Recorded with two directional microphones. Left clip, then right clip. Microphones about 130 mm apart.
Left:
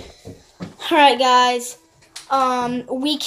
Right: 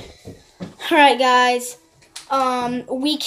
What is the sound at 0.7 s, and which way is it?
Speech, 10° right (ahead or behind).